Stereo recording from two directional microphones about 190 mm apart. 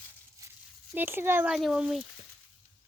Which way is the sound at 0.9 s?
10° right (ahead or behind).